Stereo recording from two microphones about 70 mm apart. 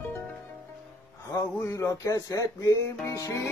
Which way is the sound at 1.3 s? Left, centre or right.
Left.